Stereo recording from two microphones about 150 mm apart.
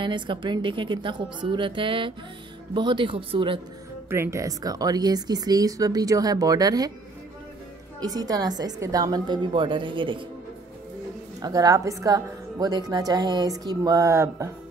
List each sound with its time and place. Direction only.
0.0 s a woman's voice: 30° right (ahead or behind)
4.1 s a woman's voice: 20° right (ahead or behind)
8.0 s a woman's voice: 25° right (ahead or behind)
11.4 s a woman's voice: 25° right (ahead or behind)